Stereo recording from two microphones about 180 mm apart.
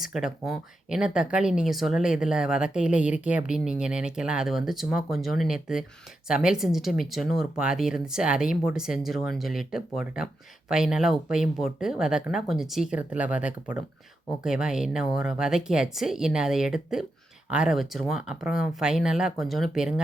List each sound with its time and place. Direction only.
0.0 s speech: centre (ahead or behind)